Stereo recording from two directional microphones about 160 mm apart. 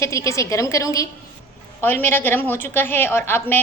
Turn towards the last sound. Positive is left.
turn(degrees=15)  # may be behind; listen again after turning